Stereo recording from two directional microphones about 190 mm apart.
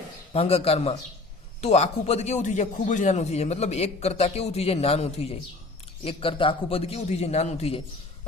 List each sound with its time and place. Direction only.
0.3 s a man's voice: 30° left (ahead or behind)